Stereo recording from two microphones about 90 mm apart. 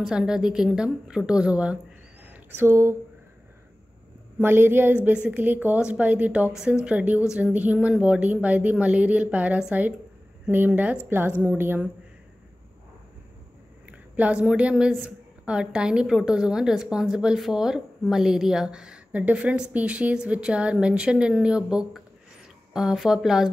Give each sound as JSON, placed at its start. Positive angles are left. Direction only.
{"t": 0.0, "sound": "speech", "side_deg": -10}
{"t": 2.2, "sound": "speech", "side_deg": -25}
{"t": 4.4, "sound": "speech", "side_deg": -25}
{"t": 13.8, "sound": "speech", "side_deg": -15}